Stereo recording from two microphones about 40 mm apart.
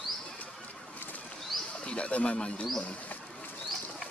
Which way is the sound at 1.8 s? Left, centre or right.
Left.